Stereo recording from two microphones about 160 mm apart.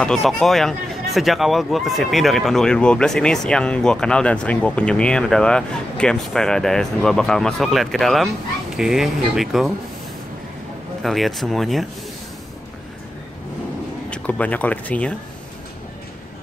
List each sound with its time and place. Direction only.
0.0 s speech: centre (ahead or behind)
11.0 s speech: centre (ahead or behind)
14.1 s speech: 10° left (ahead or behind)